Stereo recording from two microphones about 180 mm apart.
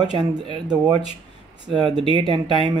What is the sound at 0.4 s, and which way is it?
Speech, 25° right (ahead or behind).